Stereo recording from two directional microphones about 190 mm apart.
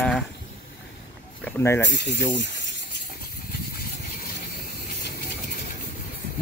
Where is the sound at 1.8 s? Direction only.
65° left (ahead or behind).